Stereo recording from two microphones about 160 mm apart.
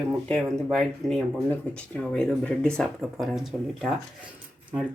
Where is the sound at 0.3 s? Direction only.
5° left (ahead or behind).